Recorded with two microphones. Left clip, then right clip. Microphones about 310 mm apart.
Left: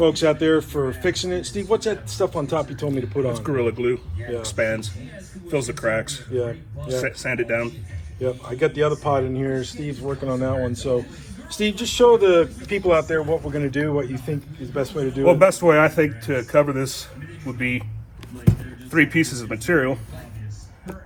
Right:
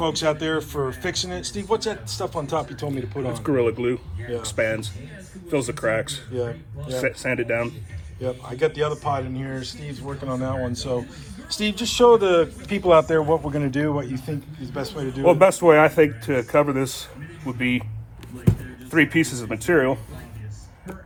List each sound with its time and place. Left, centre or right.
0.0 s speech: centre
3.3 s speech: right
8.2 s speech: centre
15.3 s a man's voice: right
18.9 s a man's voice: right